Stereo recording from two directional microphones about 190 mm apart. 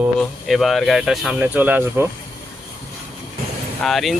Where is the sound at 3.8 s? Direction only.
Centre (ahead or behind).